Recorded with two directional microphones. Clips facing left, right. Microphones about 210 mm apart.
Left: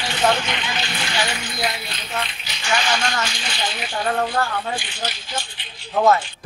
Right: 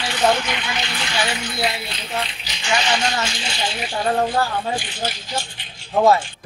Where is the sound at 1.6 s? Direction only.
25° right (ahead or behind).